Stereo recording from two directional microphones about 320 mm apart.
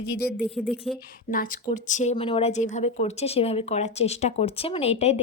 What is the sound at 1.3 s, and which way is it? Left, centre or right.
Speech, left.